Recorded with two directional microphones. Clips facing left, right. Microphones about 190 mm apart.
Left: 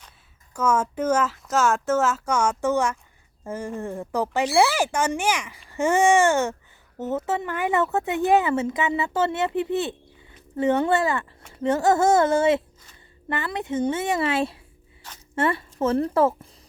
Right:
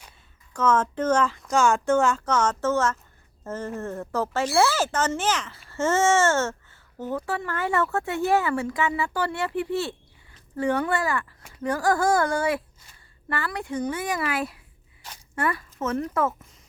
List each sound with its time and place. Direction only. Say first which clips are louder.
0.5 s a woman's voice: even; 10° left (ahead or behind); by 16.5 s 30° left (ahead or behind)